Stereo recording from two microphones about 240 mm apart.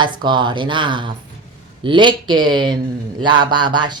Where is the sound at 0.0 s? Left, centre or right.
Centre.